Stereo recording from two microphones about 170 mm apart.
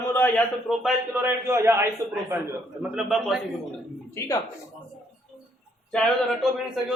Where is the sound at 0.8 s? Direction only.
15° right (ahead or behind).